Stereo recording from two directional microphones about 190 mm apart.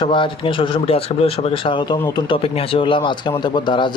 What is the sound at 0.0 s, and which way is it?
Speech, 25° left (ahead or behind).